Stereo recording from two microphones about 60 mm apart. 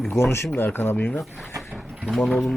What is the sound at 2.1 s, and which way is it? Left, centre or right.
Speech, centre.